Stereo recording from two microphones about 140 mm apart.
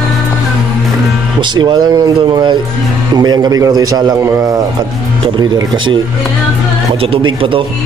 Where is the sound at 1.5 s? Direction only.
30° right (ahead or behind).